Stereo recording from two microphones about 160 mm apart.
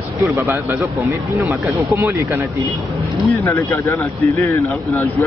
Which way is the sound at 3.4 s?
15° left (ahead or behind).